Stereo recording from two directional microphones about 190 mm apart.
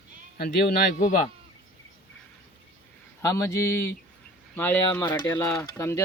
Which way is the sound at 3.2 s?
15° left (ahead or behind).